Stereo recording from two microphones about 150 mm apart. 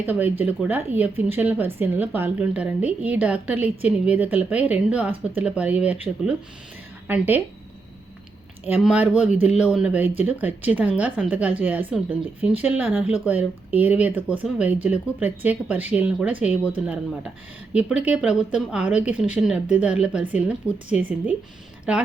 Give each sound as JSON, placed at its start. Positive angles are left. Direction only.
{"t": 0.0, "sound": "speech", "side_deg": -10}
{"t": 8.8, "sound": "speech", "side_deg": -5}
{"t": 17.7, "sound": "speech", "side_deg": -5}